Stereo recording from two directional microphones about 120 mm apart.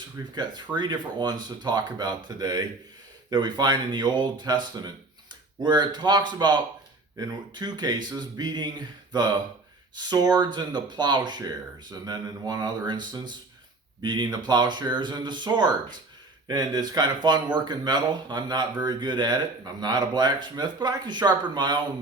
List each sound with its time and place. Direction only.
0.2 s speech: 30° right (ahead or behind)
9.9 s speech: 35° right (ahead or behind)